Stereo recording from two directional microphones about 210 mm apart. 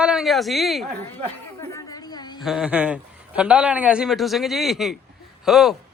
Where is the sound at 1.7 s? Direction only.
20° left (ahead or behind).